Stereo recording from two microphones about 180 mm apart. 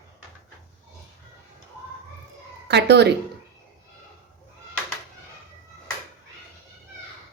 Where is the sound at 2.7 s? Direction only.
70° right (ahead or behind).